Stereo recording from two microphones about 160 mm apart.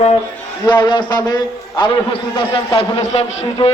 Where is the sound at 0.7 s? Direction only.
30° left (ahead or behind).